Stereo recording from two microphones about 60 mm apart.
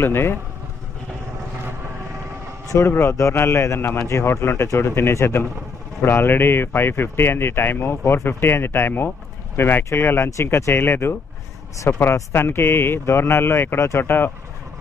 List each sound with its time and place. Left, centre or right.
0.0 s speech: left
2.7 s speech: left